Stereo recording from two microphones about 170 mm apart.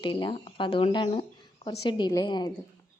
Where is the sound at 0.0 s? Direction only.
30° left (ahead or behind).